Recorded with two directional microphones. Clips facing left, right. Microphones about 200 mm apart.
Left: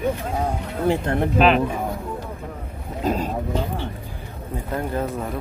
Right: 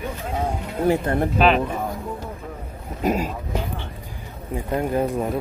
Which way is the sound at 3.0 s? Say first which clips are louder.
Right 1 dB; 15° right (ahead or behind).